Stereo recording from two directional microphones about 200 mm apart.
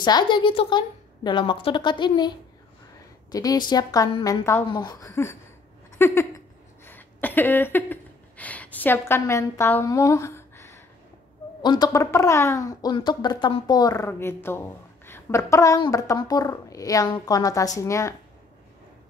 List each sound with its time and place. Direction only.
0.0 s a woman's voice: 20° left (ahead or behind)
5.9 s a sound: 15° left (ahead or behind)
11.6 s speech: 20° left (ahead or behind)